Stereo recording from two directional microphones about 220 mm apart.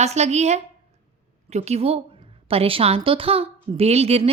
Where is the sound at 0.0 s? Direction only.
30° right (ahead or behind).